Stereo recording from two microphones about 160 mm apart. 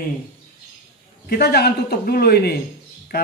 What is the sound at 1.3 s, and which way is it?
A man's voice, 85° left.